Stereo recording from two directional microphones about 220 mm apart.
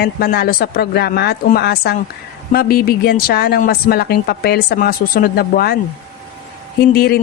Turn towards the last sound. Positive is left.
turn(degrees=45)  # may be behind; listen again after turning